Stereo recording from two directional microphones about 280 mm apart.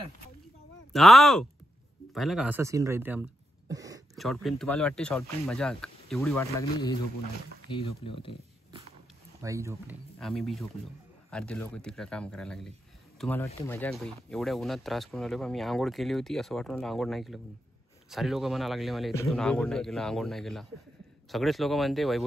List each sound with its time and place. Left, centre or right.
0.9 s speech: centre
4.1 s speech: centre
7.7 s speech: centre
9.4 s speech: centre
10.1 s speech: centre